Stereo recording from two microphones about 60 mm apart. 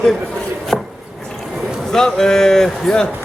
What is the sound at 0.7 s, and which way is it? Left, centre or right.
Wood, centre.